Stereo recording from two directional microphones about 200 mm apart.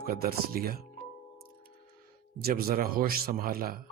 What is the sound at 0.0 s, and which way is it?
Speech, 45° right (ahead or behind).